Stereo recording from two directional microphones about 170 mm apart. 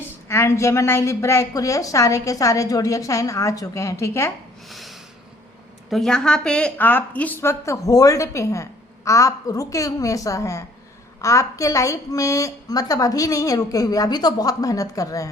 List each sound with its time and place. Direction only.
0.0 s a woman's voice: 15° left (ahead or behind)
4.7 s snort: centre (ahead or behind)
5.9 s a woman's voice: 5° left (ahead or behind); by 15.3 s 20° left (ahead or behind)